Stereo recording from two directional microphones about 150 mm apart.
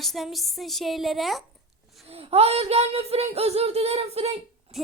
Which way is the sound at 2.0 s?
40° right (ahead or behind).